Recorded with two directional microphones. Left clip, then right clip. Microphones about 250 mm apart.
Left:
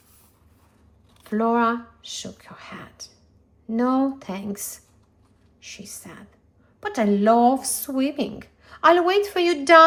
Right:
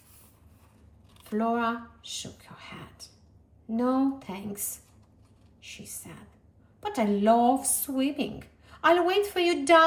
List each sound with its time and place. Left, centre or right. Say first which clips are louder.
1.2 s speech: left 7 dB; left